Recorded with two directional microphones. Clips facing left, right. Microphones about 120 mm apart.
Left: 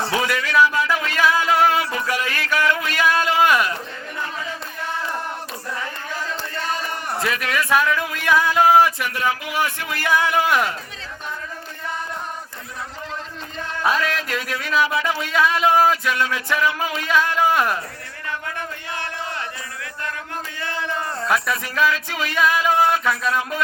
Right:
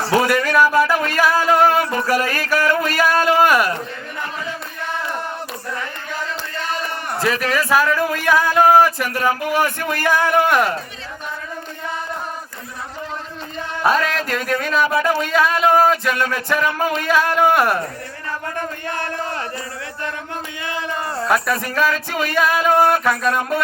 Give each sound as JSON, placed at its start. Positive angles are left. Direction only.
{"t": 0.1, "sound": "speech", "side_deg": -50}
{"t": 7.3, "sound": "a man's voice", "side_deg": -35}
{"t": 7.7, "sound": "speech", "side_deg": 0}
{"t": 7.9, "sound": "speech", "side_deg": -45}
{"t": 8.5, "sound": "a sound", "side_deg": -45}
{"t": 9.0, "sound": "speech", "side_deg": -45}
{"t": 13.8, "sound": "speech", "side_deg": -45}
{"t": 18.3, "sound": "a sound", "side_deg": -40}
{"t": 20.6, "sound": "speech", "side_deg": -15}
{"t": 21.2, "sound": "speech", "side_deg": 0}
{"t": 21.6, "sound": "speech", "side_deg": -45}